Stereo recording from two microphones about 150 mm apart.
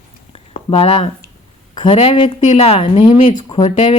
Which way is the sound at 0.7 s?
40° left (ahead or behind).